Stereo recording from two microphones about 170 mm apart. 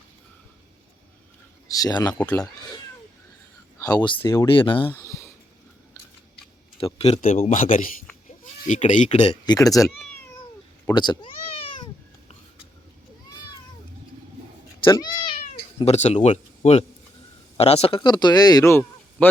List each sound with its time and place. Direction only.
1.6 s speech: 20° left (ahead or behind)
2.1 s speech: 10° left (ahead or behind)
3.8 s speech: 20° left (ahead or behind)
4.9 s a sound: 15° left (ahead or behind)
6.8 s speech: 30° left (ahead or behind)
7.2 s speech: 50° left (ahead or behind)
9.5 s speech: 20° left (ahead or behind)
14.8 s cat: 20° left (ahead or behind); by 16.8 s 40° left (ahead or behind)
17.6 s speech: 35° left (ahead or behind); by 19.3 s 15° left (ahead or behind)